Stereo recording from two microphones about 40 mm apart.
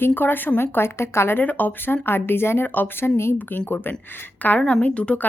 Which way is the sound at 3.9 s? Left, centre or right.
Left.